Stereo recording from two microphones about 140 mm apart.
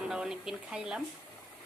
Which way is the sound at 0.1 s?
5° right (ahead or behind).